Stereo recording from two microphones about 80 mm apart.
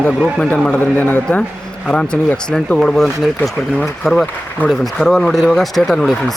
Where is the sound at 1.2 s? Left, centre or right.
Centre.